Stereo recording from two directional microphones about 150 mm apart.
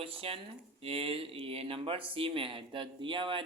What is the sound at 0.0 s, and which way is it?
A man's voice, 40° right (ahead or behind).